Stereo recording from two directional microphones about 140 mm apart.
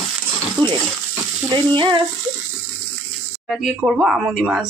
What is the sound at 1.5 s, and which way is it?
Speech, 35° right (ahead or behind).